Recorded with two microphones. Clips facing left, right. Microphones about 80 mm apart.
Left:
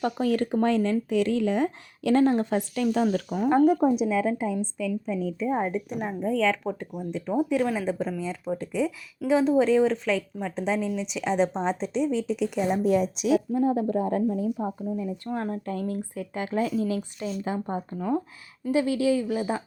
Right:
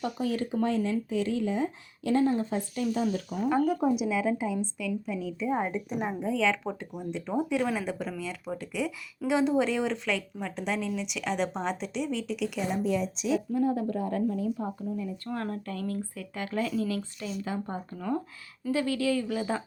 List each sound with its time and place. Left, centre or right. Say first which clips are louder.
0.0 s speech: left 5 dB; left
3.2 s speech: left 7 dB; left
4.0 s a woman's voice: left 3 dB; centre
5.4 s a woman's voice: left 1 dB; centre
7.8 s a woman's voice: left 5 dB; left
10.1 s speech: left 4 dB; centre
11.2 s a woman's voice: left 6 dB; centre
11.6 s a woman's voice: left 5 dB; left
12.8 s a woman's voice: left 6 dB; left
13.5 s speech: left 4 dB; left
17.9 s a woman's voice: left 3 dB; centre